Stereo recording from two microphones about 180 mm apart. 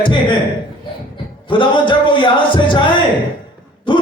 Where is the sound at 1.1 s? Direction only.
25° left (ahead or behind).